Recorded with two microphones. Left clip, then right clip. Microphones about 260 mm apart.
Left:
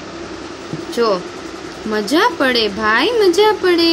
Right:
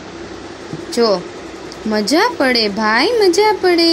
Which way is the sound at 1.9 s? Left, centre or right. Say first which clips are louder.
Even; centre.